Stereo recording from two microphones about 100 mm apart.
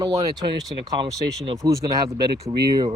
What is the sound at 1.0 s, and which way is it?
Speech, 60° right (ahead or behind).